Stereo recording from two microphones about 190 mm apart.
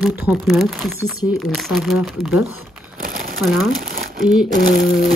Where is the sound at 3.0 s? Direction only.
50° right (ahead or behind).